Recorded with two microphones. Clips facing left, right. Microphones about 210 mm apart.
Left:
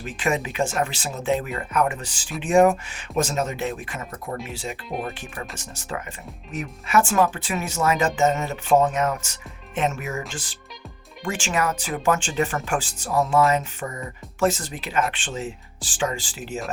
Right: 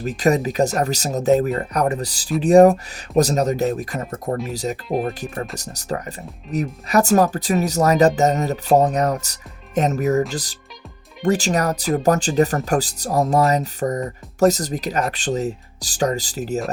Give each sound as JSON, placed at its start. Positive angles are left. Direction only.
{"t": 0.0, "sound": "speech", "side_deg": -40}